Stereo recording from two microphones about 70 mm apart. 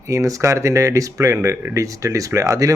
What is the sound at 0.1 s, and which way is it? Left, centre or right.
Speech, right.